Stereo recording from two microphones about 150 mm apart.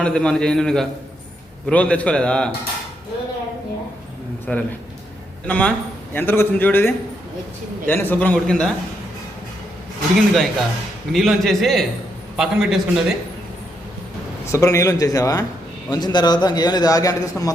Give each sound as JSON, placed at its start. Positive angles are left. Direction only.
{"t": 0.0, "sound": "a man's voice", "side_deg": 5}
{"t": 4.5, "sound": "a man's voice", "side_deg": 5}
{"t": 10.2, "sound": "a man's voice", "side_deg": 0}
{"t": 14.5, "sound": "a man's voice", "side_deg": 20}